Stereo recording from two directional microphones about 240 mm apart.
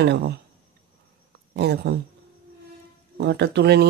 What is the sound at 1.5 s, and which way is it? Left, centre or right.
Speech, right.